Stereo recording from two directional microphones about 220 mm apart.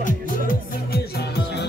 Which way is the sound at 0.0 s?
40° left (ahead or behind).